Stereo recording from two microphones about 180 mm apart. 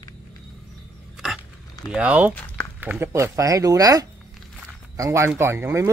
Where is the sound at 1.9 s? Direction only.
10° right (ahead or behind).